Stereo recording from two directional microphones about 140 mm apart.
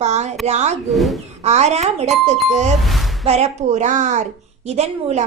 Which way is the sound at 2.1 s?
Centre (ahead or behind).